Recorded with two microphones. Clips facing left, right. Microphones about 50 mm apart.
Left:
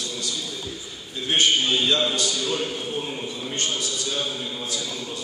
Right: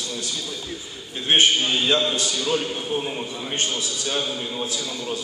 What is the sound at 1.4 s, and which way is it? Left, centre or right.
Speech, right.